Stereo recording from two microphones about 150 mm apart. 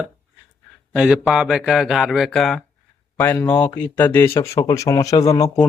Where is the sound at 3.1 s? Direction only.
15° left (ahead or behind).